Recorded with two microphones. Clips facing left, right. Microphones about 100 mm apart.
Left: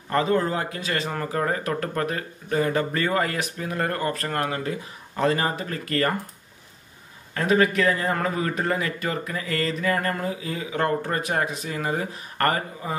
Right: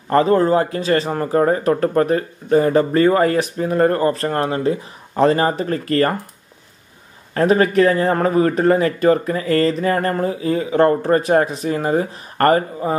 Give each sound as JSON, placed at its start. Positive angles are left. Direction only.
{"t": 0.1, "sound": "speech", "side_deg": -40}
{"t": 7.3, "sound": "speech", "side_deg": -40}